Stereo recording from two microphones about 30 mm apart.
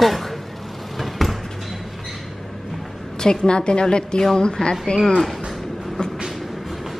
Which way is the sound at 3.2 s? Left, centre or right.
Left.